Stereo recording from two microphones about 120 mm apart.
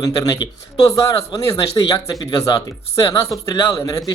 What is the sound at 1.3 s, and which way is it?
A man's voice, 30° left (ahead or behind).